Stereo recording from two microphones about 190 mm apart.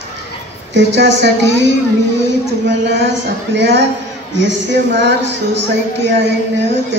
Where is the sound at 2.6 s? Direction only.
65° right (ahead or behind).